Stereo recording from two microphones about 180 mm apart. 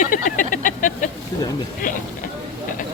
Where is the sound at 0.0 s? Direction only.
45° left (ahead or behind).